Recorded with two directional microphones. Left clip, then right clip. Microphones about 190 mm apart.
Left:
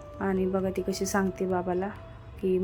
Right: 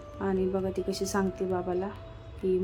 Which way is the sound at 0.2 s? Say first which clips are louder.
Left 1 dB; 15° left (ahead or behind).